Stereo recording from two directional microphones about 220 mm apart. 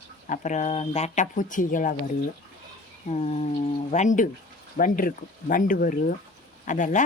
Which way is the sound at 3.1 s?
30° left (ahead or behind).